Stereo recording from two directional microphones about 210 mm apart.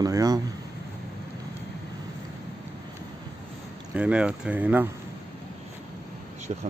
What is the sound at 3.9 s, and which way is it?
Speech, 5° right (ahead or behind).